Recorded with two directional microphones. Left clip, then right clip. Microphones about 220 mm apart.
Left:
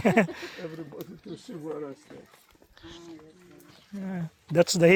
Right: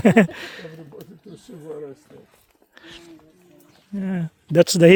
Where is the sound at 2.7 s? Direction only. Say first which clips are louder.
Right 3 dB; 50° right (ahead or behind).